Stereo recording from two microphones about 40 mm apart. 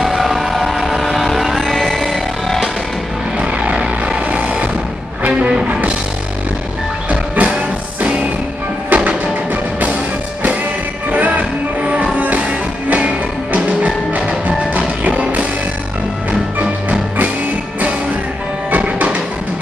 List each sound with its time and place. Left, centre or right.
0.0 s vehicle: centre
3.3 s music: right
5.7 s music: right
7.1 s music: right
8.9 s music: right
11.1 s music: right
18.8 s music: right